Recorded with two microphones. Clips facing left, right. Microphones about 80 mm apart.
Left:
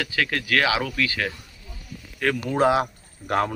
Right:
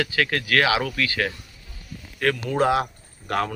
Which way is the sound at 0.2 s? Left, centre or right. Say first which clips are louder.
Right 1 dB; right.